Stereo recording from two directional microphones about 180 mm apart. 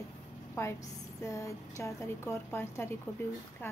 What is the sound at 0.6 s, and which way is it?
Speech, 15° left (ahead or behind).